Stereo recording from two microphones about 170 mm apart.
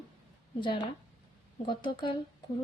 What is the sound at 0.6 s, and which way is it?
Speech, 30° left (ahead or behind).